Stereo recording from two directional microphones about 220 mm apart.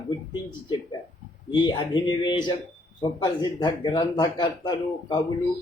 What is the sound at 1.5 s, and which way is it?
Speech, 20° left (ahead or behind).